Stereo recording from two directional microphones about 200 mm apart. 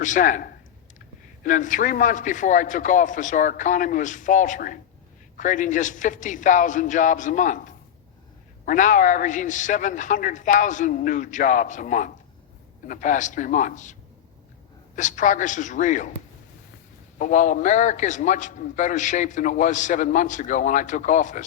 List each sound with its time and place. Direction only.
0.0 s a man's voice: 40° left (ahead or behind)
14.9 s a man's voice: 40° left (ahead or behind)
17.2 s a man's voice: 40° left (ahead or behind)